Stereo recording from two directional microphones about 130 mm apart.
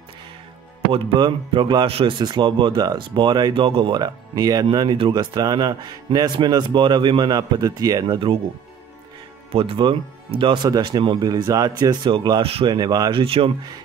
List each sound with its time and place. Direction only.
0.9 s speech: 40° right (ahead or behind)
4.0 s speech: 30° right (ahead or behind)
9.5 s speech: 45° right (ahead or behind)
12.7 s speech: 30° right (ahead or behind)
13.2 s speech: 45° right (ahead or behind)